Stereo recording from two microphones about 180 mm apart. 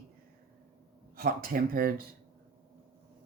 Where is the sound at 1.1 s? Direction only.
55° right (ahead or behind).